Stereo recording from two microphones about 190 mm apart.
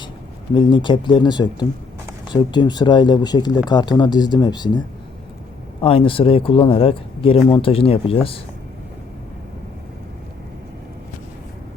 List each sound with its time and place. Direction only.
0.5 s speech: 25° left (ahead or behind)
5.8 s speech: 30° left (ahead or behind)